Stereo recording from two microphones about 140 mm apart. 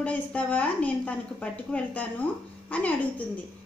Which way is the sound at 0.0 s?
10° left (ahead or behind).